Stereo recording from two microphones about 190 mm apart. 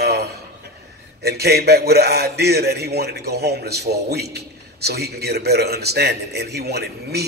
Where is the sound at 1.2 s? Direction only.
55° right (ahead or behind).